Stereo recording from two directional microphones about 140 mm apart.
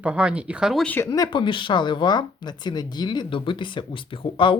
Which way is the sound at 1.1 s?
30° left (ahead or behind).